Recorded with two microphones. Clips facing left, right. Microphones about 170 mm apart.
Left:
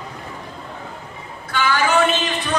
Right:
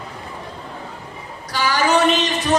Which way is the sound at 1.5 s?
40° right (ahead or behind).